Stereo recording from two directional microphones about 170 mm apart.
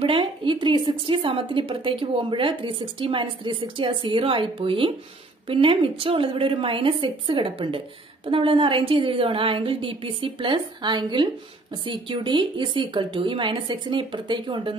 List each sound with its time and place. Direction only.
0.0 s a woman's voice: 30° right (ahead or behind)